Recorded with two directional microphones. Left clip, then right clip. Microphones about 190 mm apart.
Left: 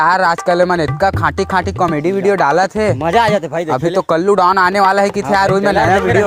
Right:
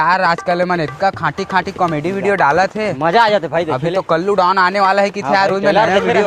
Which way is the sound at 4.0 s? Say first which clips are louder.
Left 2 dB; 65° left (ahead or behind).